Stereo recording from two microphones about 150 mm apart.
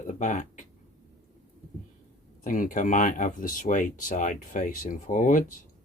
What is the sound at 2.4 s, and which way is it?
Speech, 65° left (ahead or behind).